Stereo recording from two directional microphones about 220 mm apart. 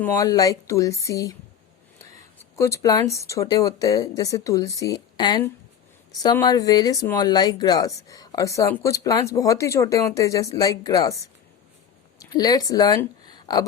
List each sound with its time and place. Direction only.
0.0 s speech: 15° left (ahead or behind)
2.6 s a woman's voice: 15° left (ahead or behind)